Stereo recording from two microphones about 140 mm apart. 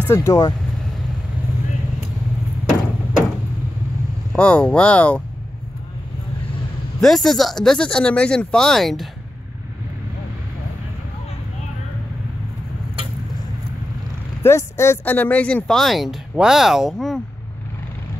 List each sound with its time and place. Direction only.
0.0 s speech: 20° left (ahead or behind)
4.3 s speech: 10° left (ahead or behind)
7.0 s speech: centre (ahead or behind)
14.4 s speech: 20° left (ahead or behind); by 17.2 s centre (ahead or behind)